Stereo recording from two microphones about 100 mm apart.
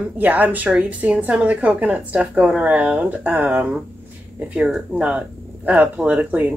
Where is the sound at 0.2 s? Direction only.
15° right (ahead or behind).